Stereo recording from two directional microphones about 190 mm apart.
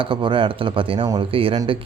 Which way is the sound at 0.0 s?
25° right (ahead or behind).